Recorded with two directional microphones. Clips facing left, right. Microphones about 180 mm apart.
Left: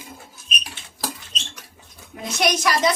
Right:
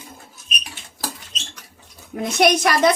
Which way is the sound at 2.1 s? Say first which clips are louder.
Right 6 dB; 55° right (ahead or behind).